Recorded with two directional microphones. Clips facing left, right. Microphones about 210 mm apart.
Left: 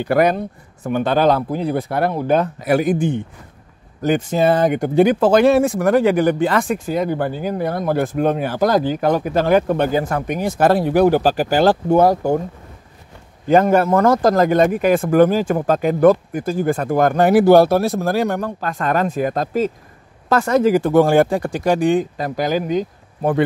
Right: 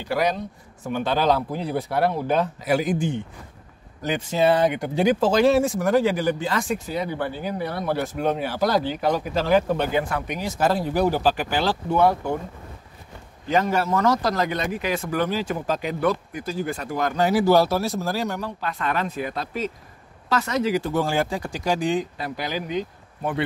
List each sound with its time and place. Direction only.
0.0 s speech: 55° left (ahead or behind)
9.9 s speech: 45° left (ahead or behind); by 11.2 s 60° left (ahead or behind)
11.2 s speech: 45° left (ahead or behind)
13.5 s speech: 50° left (ahead or behind)